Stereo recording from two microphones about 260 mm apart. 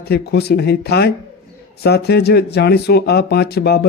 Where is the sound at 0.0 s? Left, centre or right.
Left.